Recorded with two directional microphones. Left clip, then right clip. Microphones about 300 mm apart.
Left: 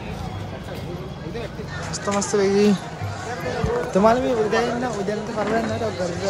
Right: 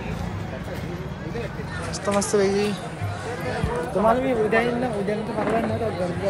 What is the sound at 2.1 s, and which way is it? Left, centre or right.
Speech, centre.